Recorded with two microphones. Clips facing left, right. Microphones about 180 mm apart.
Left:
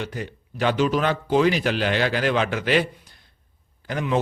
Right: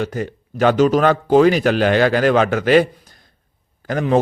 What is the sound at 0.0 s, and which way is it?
A man's voice, 45° right (ahead or behind).